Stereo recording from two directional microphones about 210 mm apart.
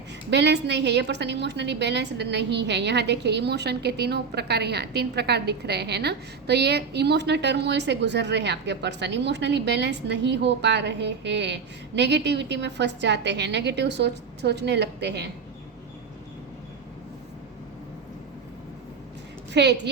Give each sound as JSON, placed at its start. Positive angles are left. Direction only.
{"t": 0.3, "sound": "a woman's voice", "side_deg": -55}
{"t": 19.5, "sound": "a woman's voice", "side_deg": -55}